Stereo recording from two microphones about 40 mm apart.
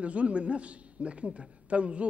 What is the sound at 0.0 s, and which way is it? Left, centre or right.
Speech, right.